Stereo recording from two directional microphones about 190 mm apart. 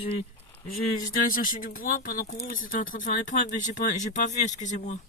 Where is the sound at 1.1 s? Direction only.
45° left (ahead or behind).